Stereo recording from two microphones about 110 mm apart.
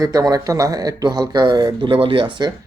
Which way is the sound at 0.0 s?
30° right (ahead or behind).